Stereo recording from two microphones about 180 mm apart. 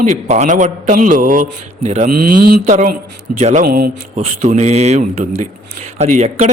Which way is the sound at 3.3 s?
45° right (ahead or behind).